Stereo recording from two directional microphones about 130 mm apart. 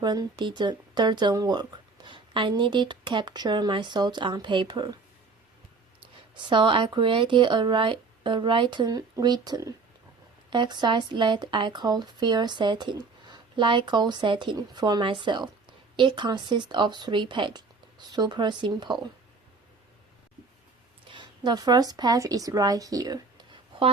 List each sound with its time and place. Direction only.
0.0 s speech: 35° right (ahead or behind)
6.3 s speech: 40° right (ahead or behind)
21.1 s a woman's voice: 35° right (ahead or behind)